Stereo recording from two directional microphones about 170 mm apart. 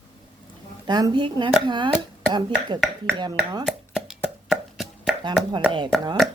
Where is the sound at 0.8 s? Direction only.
25° right (ahead or behind).